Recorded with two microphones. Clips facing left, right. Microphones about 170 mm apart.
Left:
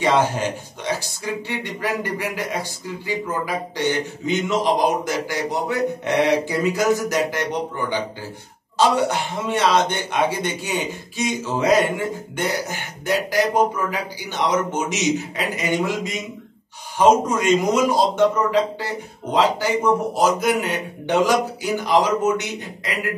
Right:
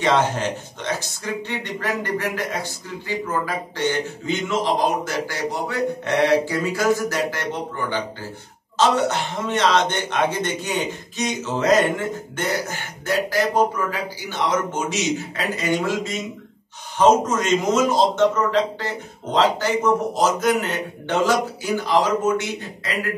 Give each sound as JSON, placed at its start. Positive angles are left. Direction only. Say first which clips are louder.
{"t": 0.0, "sound": "a man's voice", "louder": "left 1 dB", "side_deg": 10}
{"t": 8.7, "sound": "a man's voice", "louder": "left 1 dB", "side_deg": 10}